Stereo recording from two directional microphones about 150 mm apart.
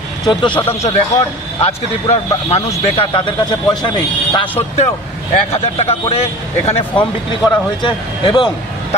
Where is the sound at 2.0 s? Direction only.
40° left (ahead or behind).